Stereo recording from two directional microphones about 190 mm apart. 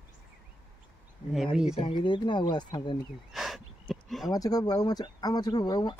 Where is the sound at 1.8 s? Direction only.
25° left (ahead or behind).